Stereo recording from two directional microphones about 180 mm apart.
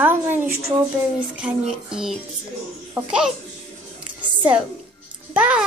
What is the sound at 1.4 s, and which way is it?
Music, 5° right (ahead or behind).